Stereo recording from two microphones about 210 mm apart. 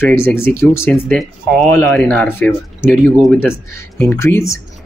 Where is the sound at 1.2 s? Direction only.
Centre (ahead or behind).